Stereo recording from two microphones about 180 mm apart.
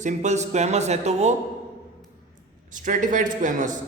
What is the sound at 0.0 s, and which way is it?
A man's voice, 40° right (ahead or behind).